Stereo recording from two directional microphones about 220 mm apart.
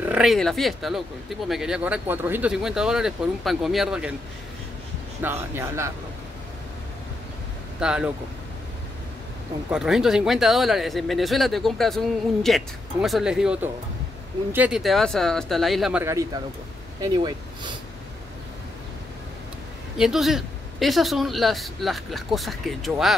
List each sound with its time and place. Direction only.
0.0 s speech: 5° right (ahead or behind)
5.2 s speech: 10° right (ahead or behind)
7.8 s speech: 5° right (ahead or behind)
9.7 s speech: 5° right (ahead or behind); by 17.7 s 20° right (ahead or behind)
20.0 s speech: centre (ahead or behind)